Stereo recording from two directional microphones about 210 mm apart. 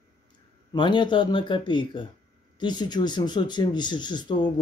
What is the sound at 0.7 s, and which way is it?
Speech, 20° left (ahead or behind).